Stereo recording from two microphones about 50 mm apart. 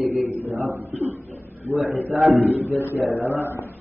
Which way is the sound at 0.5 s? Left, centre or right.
Right.